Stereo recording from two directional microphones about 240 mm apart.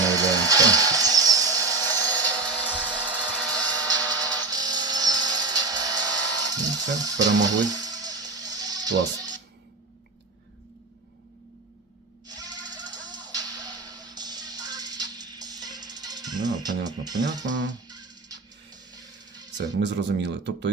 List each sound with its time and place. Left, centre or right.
0.1 s tools: centre
2.0 s a sound: centre
3.1 s a sound: centre
4.0 s a sound: centre
7.3 s music: centre
12.4 s music: centre
17.4 s speech: right
17.8 s music: centre
19.5 s speech: right